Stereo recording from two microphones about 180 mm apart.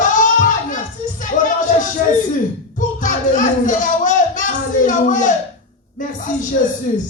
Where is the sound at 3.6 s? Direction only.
45° left (ahead or behind).